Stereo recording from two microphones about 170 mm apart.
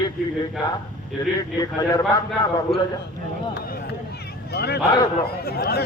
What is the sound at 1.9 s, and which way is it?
Speech, 20° left (ahead or behind).